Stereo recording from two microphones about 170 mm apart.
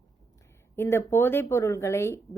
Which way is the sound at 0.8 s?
15° left (ahead or behind).